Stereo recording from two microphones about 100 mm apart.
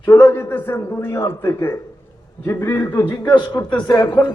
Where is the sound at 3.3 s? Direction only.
50° left (ahead or behind).